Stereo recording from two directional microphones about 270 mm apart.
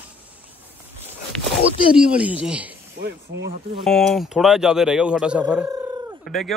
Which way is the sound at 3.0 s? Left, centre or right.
Right.